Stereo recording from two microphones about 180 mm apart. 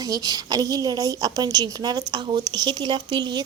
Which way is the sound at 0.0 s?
20° right (ahead or behind).